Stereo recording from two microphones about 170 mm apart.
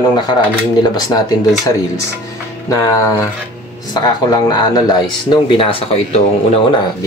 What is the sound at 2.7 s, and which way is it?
Speech, 20° left (ahead or behind).